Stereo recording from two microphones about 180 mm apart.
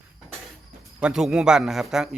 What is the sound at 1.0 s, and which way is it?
Speech, 5° right (ahead or behind).